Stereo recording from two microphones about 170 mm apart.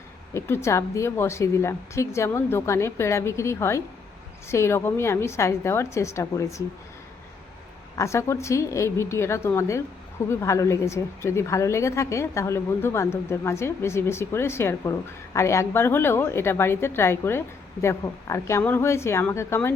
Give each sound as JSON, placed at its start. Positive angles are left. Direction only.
{"t": 0.3, "sound": "a woman's voice", "side_deg": 15}
{"t": 7.9, "sound": "a woman's voice", "side_deg": 15}